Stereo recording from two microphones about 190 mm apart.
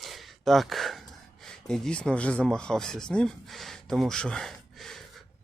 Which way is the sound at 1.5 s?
5° left (ahead or behind).